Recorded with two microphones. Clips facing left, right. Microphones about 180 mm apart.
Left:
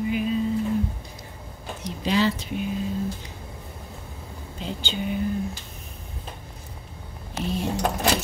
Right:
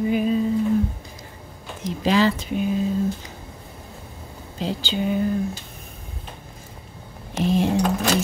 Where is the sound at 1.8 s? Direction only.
90° right.